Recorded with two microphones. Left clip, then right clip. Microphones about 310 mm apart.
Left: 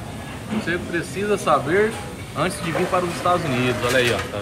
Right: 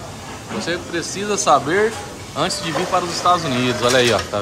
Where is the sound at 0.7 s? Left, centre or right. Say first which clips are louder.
Right 1 dB; centre.